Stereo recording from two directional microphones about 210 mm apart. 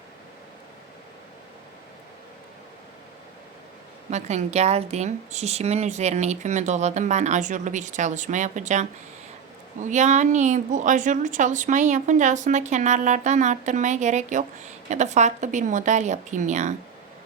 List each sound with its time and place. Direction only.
4.1 s a woman's voice: 30° right (ahead or behind)